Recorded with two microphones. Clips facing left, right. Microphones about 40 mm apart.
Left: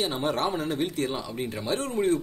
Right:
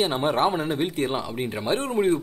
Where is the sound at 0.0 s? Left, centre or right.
Right.